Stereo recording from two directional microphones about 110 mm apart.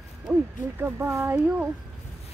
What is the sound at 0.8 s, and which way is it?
Speech, 20° right (ahead or behind).